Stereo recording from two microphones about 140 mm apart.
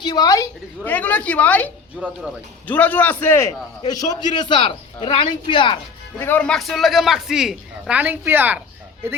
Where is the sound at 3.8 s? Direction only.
30° left (ahead or behind).